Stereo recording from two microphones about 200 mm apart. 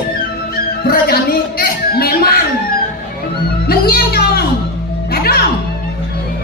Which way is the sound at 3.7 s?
50° left (ahead or behind).